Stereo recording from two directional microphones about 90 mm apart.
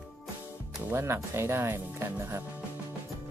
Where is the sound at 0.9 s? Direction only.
30° right (ahead or behind).